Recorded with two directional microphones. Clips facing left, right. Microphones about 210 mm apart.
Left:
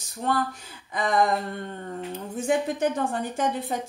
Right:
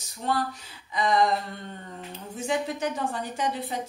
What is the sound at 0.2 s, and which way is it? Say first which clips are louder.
Speech: left 2 dB; 55° left (ahead or behind).